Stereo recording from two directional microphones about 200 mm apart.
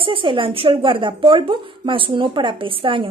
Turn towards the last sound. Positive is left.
turn(degrees=-25)  # may be behind; listen again after turning